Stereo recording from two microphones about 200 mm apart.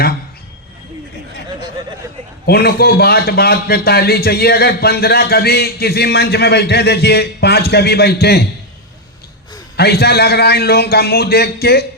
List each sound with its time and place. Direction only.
2.5 s a man's voice: 50° left (ahead or behind)
9.7 s a man's voice: 55° left (ahead or behind)